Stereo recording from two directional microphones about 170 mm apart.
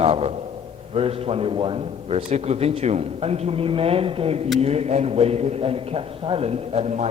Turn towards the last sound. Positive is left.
turn(degrees=-40)  # may be behind; listen again after turning